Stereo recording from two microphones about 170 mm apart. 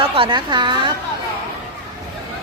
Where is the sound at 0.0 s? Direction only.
30° right (ahead or behind).